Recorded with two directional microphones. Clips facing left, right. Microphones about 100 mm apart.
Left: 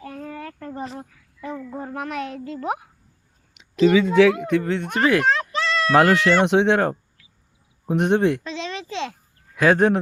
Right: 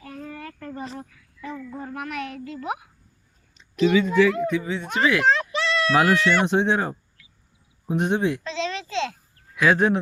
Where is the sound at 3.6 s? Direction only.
90° left; by 5.2 s 50° left (ahead or behind).